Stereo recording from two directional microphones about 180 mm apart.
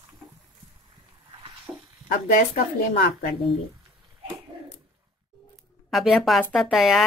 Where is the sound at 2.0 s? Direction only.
50° left (ahead or behind).